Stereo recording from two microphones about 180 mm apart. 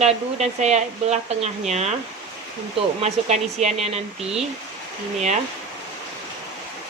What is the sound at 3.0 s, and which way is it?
Speech, 40° right (ahead or behind).